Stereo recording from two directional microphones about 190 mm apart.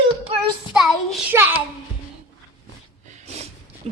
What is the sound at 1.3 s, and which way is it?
Speech, 10° right (ahead or behind).